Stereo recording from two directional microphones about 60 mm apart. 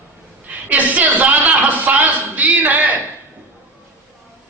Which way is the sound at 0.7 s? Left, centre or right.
Right.